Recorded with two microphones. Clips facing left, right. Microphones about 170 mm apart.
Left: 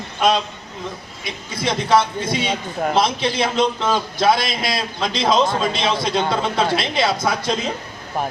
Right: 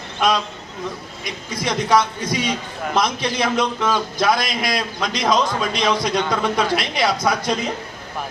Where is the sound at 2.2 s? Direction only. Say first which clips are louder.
Left 1 dB; 25° left (ahead or behind).